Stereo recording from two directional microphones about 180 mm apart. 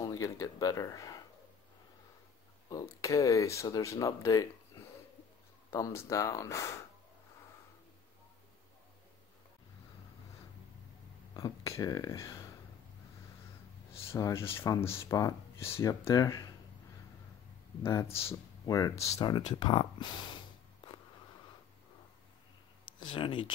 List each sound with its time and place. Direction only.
0.0 s speech: 15° left (ahead or behind)
2.7 s speech: 15° left (ahead or behind)
11.3 s speech: 20° left (ahead or behind)
14.0 s speech: 15° left (ahead or behind)
17.8 s speech: 15° left (ahead or behind)
22.9 s speech: 25° left (ahead or behind)